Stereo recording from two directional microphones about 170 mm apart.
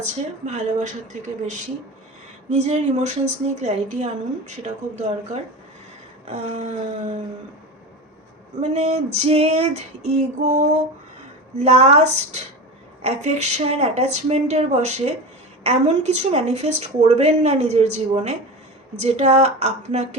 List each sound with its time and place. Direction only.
0.0 s a woman's voice: 45° right (ahead or behind)
2.5 s a woman's voice: 45° right (ahead or behind)
8.6 s a woman's voice: 40° right (ahead or behind)